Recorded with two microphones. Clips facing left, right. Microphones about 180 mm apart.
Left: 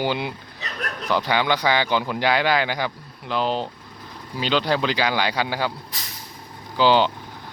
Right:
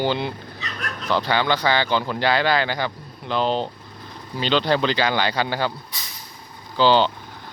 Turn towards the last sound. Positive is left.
turn(degrees=10)  # may be behind; listen again after turning